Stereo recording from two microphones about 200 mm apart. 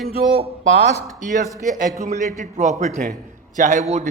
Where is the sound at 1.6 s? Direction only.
40° right (ahead or behind).